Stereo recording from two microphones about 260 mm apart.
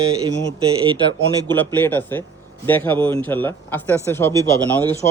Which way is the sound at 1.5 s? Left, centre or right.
Centre.